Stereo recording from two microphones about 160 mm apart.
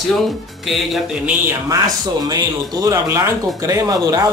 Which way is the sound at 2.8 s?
20° right (ahead or behind).